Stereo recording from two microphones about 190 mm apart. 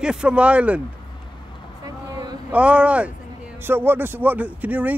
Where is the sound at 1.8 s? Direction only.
20° right (ahead or behind).